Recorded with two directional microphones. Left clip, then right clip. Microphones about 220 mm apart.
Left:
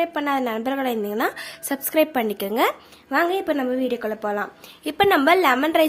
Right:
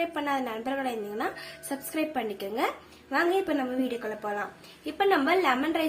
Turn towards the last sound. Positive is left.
turn(degrees=45)  # may be behind; listen again after turning